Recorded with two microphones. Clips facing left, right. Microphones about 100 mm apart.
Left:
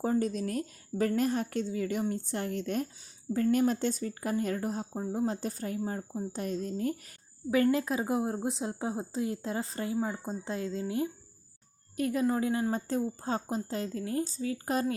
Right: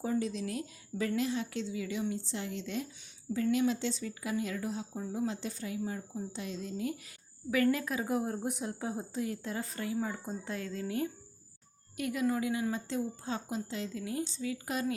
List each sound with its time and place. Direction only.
0.0 s a woman's voice: 45° left (ahead or behind)
7.5 s a woman's voice: 30° left (ahead or behind)
11.9 s a woman's voice: 35° left (ahead or behind)